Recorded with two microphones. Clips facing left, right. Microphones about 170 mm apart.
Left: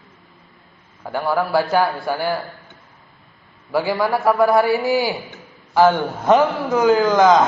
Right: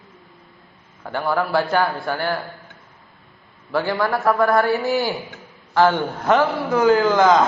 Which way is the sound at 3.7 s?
10° left (ahead or behind).